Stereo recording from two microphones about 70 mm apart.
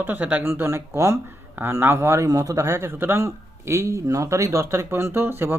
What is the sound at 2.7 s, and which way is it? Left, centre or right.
Speech, right.